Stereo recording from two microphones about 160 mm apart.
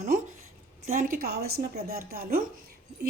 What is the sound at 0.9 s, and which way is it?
A woman's voice, 60° right (ahead or behind).